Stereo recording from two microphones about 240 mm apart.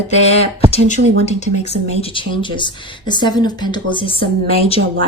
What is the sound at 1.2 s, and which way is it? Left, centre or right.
Speech, left.